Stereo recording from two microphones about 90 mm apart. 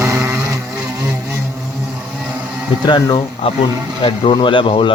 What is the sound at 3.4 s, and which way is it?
Speech, 90° left.